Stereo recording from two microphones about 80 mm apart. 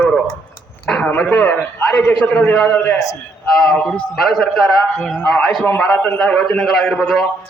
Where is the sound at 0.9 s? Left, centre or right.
Centre.